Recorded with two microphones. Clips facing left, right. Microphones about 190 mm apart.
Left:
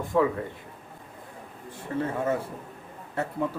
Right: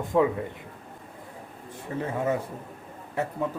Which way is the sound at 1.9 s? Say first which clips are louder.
Left 3 dB; 15° right (ahead or behind).